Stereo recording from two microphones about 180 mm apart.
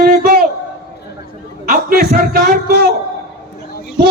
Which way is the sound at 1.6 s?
55° right (ahead or behind).